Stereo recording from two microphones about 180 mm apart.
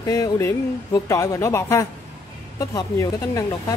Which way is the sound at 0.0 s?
20° left (ahead or behind).